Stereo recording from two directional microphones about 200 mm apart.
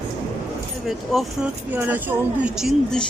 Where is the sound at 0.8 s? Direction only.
Centre (ahead or behind).